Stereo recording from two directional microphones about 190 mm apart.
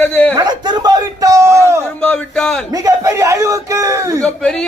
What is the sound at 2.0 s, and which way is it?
Speech, 5° left (ahead or behind).